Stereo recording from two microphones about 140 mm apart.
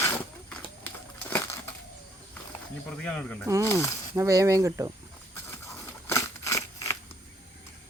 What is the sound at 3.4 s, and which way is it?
Speech, 20° right (ahead or behind).